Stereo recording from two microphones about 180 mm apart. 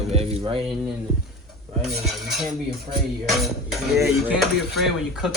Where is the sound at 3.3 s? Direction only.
Centre (ahead or behind).